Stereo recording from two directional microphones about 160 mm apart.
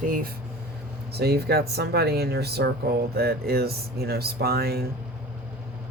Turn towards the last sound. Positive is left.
turn(degrees=-75)  # may be behind; listen again after turning